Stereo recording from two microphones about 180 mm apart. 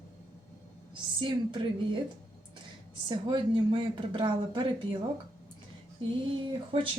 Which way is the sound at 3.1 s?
25° right (ahead or behind).